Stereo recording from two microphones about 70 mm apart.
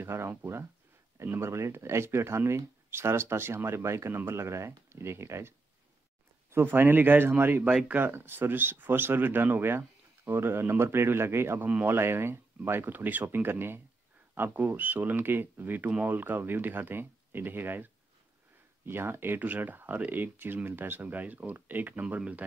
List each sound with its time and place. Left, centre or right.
0.0 s speech: right
6.5 s speech: right